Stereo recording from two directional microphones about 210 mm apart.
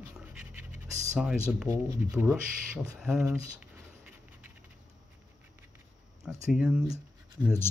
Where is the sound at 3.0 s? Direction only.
Centre (ahead or behind).